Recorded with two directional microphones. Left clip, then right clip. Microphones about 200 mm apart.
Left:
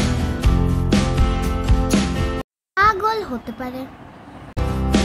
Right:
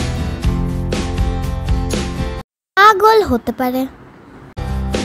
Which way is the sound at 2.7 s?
35° right (ahead or behind).